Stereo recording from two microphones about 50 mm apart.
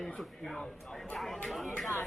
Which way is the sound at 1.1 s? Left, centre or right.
Centre.